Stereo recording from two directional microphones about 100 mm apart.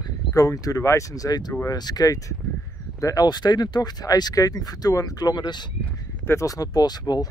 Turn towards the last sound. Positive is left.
turn(degrees=45)  # may be behind; listen again after turning